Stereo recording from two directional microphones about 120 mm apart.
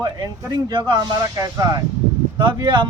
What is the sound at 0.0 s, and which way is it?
Speech, 30° right (ahead or behind).